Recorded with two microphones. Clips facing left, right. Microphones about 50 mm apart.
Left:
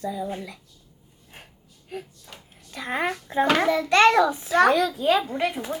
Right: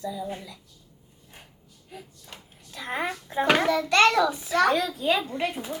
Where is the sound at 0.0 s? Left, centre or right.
Left.